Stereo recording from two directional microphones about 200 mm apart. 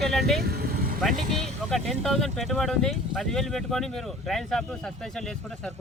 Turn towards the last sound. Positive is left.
turn(degrees=0)  # may be behind; listen again after turning